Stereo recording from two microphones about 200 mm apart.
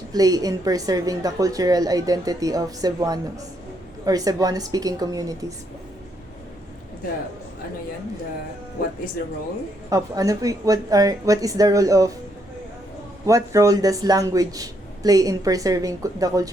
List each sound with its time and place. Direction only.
0.1 s speech: 20° right (ahead or behind)
9.9 s speech: 15° right (ahead or behind)
13.2 s speech: 15° right (ahead or behind)